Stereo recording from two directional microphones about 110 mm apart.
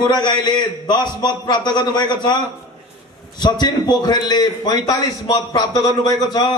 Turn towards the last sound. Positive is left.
turn(degrees=35)  # may be behind; listen again after turning